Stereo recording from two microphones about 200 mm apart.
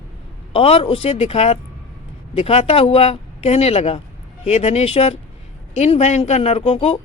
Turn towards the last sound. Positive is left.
turn(degrees=30)  # may be behind; listen again after turning